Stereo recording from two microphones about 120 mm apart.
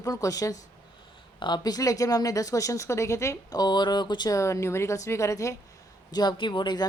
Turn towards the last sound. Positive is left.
turn(degrees=40)  # may be behind; listen again after turning